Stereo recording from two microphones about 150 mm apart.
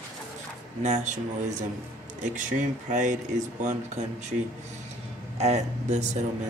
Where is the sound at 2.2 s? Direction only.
55° right (ahead or behind).